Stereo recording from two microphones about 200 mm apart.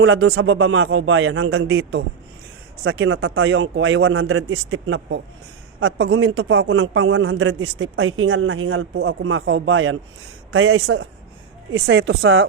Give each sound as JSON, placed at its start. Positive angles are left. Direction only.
{"t": 0.0, "sound": "a man's voice", "side_deg": -60}